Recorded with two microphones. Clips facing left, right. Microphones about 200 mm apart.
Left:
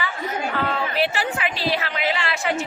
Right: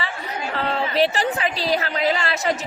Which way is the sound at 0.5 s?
35° right (ahead or behind).